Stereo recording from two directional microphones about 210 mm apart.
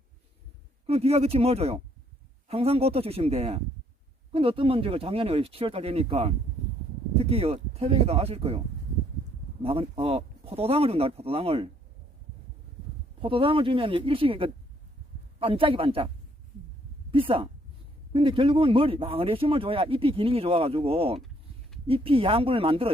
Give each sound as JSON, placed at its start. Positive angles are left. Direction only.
{"t": 0.9, "sound": "speech", "side_deg": -30}
{"t": 9.6, "sound": "speech", "side_deg": -25}
{"t": 13.2, "sound": "speech", "side_deg": -25}
{"t": 17.1, "sound": "speech", "side_deg": -25}